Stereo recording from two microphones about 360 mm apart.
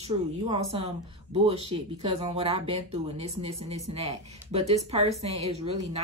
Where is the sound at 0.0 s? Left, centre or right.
Centre.